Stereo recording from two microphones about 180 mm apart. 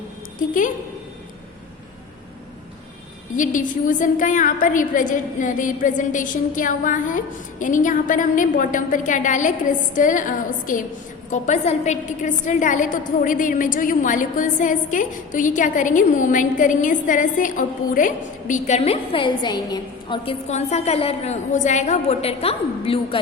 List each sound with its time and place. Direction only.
0.3 s a woman's voice: 50° left (ahead or behind)
3.3 s a woman's voice: 45° left (ahead or behind); by 20.3 s 25° left (ahead or behind)
20.5 s a woman's voice: 40° left (ahead or behind)